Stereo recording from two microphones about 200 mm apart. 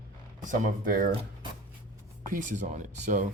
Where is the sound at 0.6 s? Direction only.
45° right (ahead or behind).